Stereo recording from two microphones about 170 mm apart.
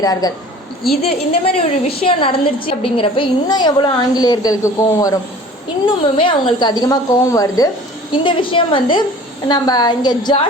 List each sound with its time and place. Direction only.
0.0 s a woman's voice: 20° left (ahead or behind)
1.3 s a woman's voice: 35° left (ahead or behind); by 5.1 s 20° left (ahead or behind)
5.8 s a woman's voice: 30° left (ahead or behind)